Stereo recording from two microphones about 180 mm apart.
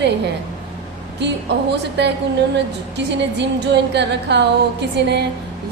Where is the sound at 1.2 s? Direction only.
70° right (ahead or behind).